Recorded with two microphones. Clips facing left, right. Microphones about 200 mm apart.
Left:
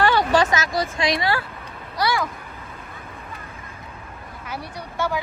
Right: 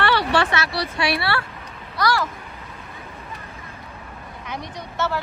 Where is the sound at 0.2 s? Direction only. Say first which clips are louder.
Left 2 dB; 45° left (ahead or behind).